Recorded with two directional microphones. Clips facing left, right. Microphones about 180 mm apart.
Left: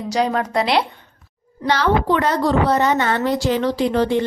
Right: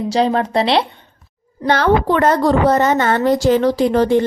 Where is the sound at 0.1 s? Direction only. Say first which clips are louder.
Right 3 dB; 30° right (ahead or behind).